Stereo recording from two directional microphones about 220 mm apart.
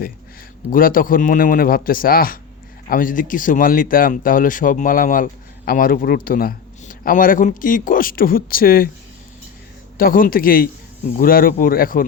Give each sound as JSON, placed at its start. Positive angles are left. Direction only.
{"t": 0.7, "sound": "speech", "side_deg": 40}
{"t": 10.0, "sound": "speech", "side_deg": 40}